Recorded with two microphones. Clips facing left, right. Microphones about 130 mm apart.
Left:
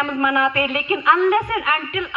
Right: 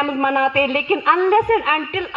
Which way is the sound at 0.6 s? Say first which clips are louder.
Right 2 dB; 55° right (ahead or behind).